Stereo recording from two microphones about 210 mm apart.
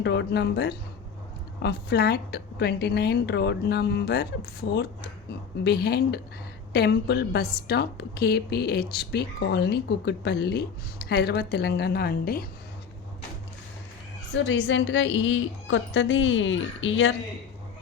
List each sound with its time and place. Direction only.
0.0 s a woman's voice: 55° left (ahead or behind)
5.6 s a woman's voice: 50° left (ahead or behind)
14.3 s a woman's voice: 60° left (ahead or behind)